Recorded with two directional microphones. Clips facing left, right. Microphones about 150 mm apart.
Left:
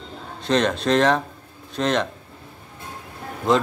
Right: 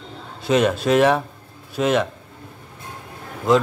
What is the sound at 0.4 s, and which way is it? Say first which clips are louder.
Speech: right 3 dB; 5° right (ahead or behind).